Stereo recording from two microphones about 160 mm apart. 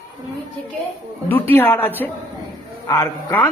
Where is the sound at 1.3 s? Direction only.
10° left (ahead or behind).